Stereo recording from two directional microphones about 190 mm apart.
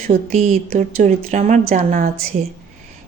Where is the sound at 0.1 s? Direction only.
35° right (ahead or behind).